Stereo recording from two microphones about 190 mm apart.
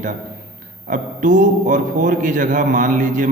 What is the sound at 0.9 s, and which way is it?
A man's voice, 40° right (ahead or behind).